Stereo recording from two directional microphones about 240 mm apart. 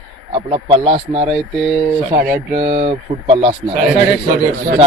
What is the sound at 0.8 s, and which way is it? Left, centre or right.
Speech, right.